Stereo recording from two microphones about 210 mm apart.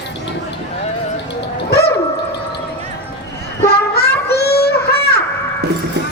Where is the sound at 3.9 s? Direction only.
50° left (ahead or behind).